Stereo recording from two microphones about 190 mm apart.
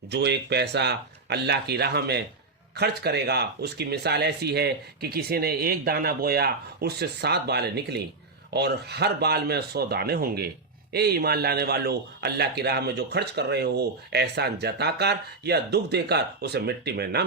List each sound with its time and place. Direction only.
0.1 s a man's voice: 60° right (ahead or behind)